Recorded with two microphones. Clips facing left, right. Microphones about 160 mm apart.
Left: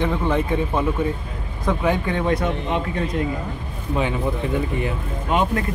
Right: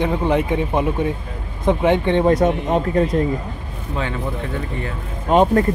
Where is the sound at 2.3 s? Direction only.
45° right (ahead or behind).